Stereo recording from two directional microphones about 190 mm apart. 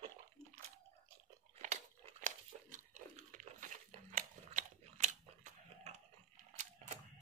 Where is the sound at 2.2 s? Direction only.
40° right (ahead or behind).